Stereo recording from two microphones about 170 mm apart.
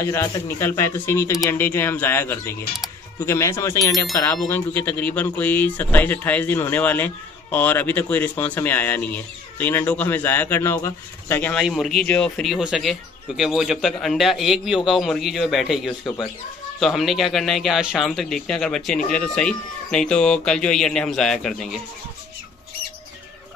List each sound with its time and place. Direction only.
0.0 s speech: 15° left (ahead or behind)
11.6 s speech: centre (ahead or behind)